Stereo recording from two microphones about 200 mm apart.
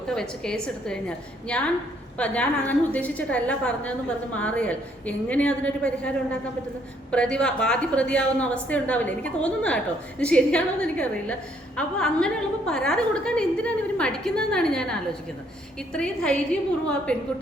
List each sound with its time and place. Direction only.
0.1 s a woman's voice: 5° left (ahead or behind)